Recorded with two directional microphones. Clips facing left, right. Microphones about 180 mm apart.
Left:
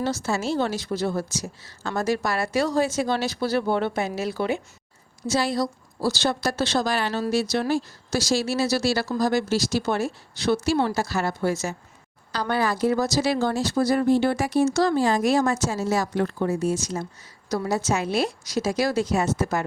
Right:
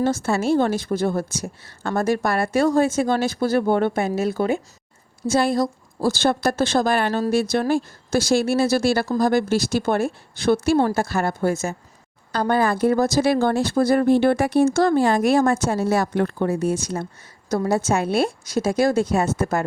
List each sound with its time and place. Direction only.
0.0 s a woman's voice: 55° right (ahead or behind)